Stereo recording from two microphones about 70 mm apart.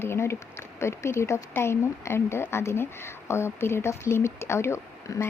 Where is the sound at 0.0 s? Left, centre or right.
Left.